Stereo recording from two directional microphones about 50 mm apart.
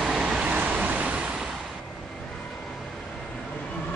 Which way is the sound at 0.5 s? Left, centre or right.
Right.